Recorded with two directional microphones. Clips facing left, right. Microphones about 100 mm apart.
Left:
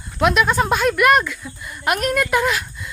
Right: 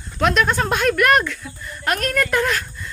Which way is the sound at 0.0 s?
5° left (ahead or behind).